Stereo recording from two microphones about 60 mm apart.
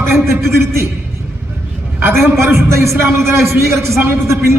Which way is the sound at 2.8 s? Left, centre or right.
Right.